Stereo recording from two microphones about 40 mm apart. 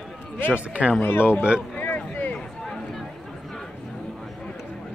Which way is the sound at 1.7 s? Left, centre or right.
Left.